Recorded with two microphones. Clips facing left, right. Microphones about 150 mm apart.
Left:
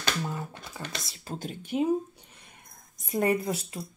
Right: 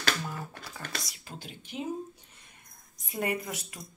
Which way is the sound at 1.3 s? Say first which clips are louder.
Left 11 dB; 45° left (ahead or behind).